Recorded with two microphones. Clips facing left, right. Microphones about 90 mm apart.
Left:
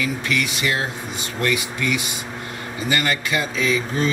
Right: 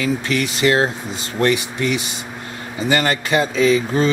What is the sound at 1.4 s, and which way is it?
Speech, 30° right (ahead or behind).